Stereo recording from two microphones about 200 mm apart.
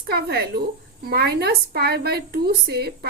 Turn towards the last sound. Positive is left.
turn(degrees=-55)  # may be behind; listen again after turning